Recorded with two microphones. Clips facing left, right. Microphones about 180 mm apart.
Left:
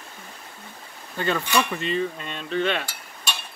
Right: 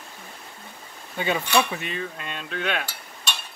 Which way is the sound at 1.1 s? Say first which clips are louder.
Right 1 dB; 10° right (ahead or behind).